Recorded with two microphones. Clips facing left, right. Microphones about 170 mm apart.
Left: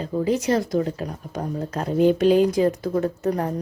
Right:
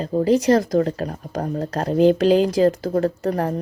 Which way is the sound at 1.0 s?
50° right (ahead or behind).